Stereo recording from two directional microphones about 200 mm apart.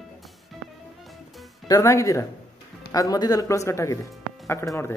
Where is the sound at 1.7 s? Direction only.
15° left (ahead or behind).